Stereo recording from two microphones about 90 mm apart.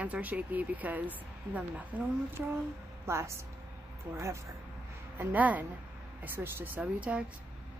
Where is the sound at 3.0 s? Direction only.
30° right (ahead or behind).